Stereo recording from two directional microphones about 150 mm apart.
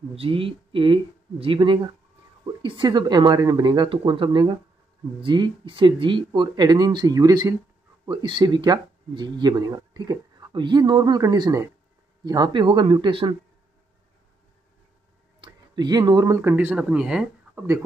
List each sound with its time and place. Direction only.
0.1 s speech: 40° right (ahead or behind)
15.4 s speech: 30° right (ahead or behind); by 17.6 s 5° right (ahead or behind)